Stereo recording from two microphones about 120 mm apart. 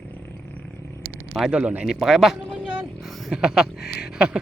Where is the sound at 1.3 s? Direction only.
10° right (ahead or behind).